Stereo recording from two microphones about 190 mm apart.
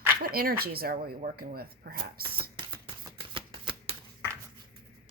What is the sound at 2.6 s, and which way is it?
Shuffling cards, 25° right (ahead or behind).